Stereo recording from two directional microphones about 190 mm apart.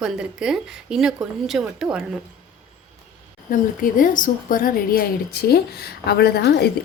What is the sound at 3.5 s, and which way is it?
A woman's voice, 45° left (ahead or behind).